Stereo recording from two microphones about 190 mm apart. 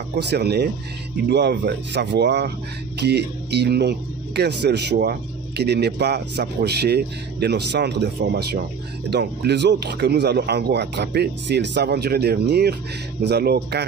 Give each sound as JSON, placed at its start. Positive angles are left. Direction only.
{"t": 0.3, "sound": "speech", "side_deg": -60}